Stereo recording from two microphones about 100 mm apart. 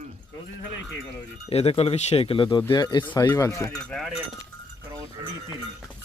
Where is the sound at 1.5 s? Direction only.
90° left; by 2.6 s 60° left (ahead or behind).